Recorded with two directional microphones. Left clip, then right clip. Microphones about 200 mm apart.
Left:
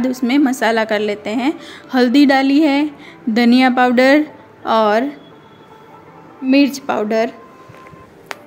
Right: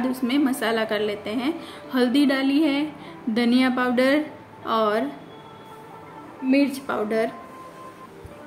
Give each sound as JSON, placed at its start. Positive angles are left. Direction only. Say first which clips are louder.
{"t": 0.0, "sound": "a woman's voice", "louder": "left 7 dB", "side_deg": 35}
{"t": 6.5, "sound": "a woman's voice", "louder": "left 8 dB", "side_deg": 40}